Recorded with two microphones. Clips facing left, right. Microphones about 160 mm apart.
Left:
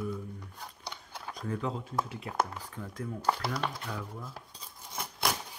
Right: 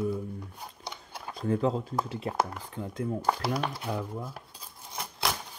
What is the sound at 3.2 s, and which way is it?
Speech, 10° right (ahead or behind).